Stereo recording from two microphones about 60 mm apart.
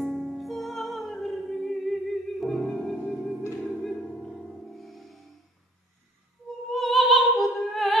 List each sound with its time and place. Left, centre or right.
0.0 s music: centre
6.7 s opera: centre